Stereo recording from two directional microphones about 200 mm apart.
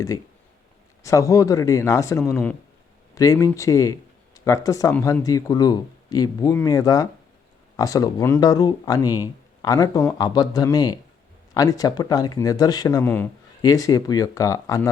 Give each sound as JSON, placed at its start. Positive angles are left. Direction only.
{"t": 1.0, "sound": "speech", "side_deg": 15}